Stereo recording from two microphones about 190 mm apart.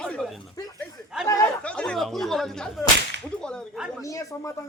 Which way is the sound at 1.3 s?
10° left (ahead or behind).